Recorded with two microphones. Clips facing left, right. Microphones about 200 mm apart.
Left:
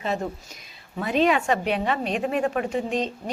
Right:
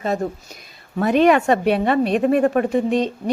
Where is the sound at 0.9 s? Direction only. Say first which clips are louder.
Right 7 dB; 60° right (ahead or behind).